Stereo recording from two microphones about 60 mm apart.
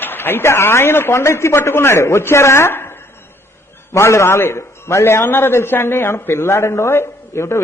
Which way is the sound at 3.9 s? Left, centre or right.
Left.